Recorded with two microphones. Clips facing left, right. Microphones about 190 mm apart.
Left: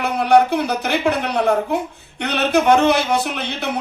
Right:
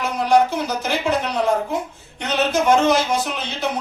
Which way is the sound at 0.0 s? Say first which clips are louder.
Left 2 dB; 60° left (ahead or behind).